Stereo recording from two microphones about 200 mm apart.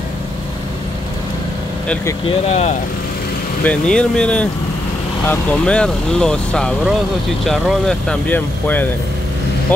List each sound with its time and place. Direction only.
2.2 s speech: 30° left (ahead or behind)
3.6 s speech: 5° left (ahead or behind)